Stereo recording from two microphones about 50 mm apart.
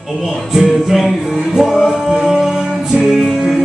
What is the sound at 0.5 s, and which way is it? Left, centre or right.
Music, centre.